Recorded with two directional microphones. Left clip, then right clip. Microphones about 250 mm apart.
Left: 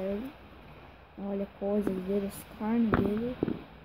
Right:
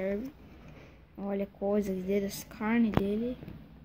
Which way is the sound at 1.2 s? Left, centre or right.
Centre.